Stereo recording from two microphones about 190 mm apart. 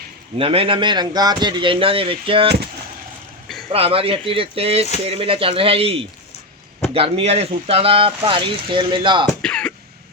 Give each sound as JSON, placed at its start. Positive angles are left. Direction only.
{"t": 0.3, "sound": "speech", "side_deg": -30}
{"t": 3.7, "sound": "speech", "side_deg": -30}
{"t": 9.2, "sound": "throat clearing", "side_deg": 5}